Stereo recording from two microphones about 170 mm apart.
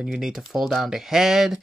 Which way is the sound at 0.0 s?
5° right (ahead or behind).